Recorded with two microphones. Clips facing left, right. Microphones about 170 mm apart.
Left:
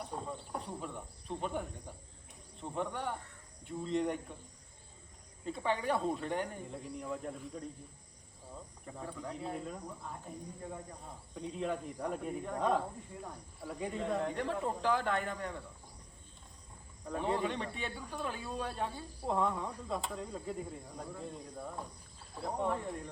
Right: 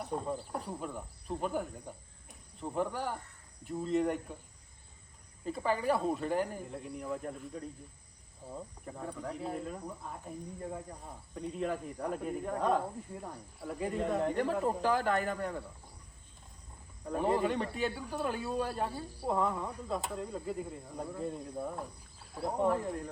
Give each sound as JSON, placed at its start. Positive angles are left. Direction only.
{"t": 0.3, "sound": "speech", "side_deg": 0}
{"t": 5.5, "sound": "speech", "side_deg": -5}
{"t": 9.0, "sound": "speech", "side_deg": 0}
{"t": 11.3, "sound": "speech", "side_deg": 0}
{"t": 17.1, "sound": "speech", "side_deg": -5}